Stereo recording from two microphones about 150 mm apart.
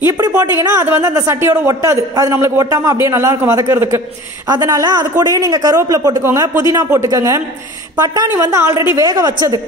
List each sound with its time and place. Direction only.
0.4 s a man's voice: 20° right (ahead or behind)